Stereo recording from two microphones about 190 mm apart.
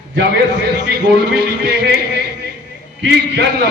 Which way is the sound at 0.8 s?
65° right (ahead or behind).